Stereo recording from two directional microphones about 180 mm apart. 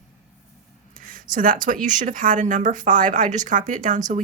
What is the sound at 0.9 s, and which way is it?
Speech, 50° right (ahead or behind).